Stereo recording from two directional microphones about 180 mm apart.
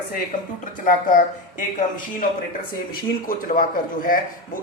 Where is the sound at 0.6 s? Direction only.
45° left (ahead or behind).